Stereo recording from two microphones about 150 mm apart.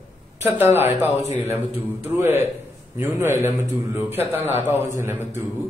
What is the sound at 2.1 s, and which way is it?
A man's voice, 15° right (ahead or behind).